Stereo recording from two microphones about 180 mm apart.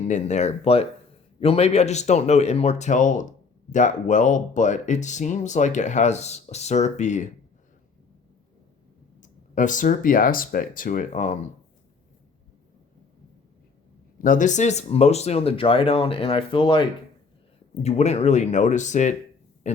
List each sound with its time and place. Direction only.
0.0 s speech: 40° left (ahead or behind)
9.2 s speech: 45° left (ahead or behind)
14.2 s speech: 45° left (ahead or behind); by 16.8 s 30° left (ahead or behind)
17.8 s speech: 35° left (ahead or behind)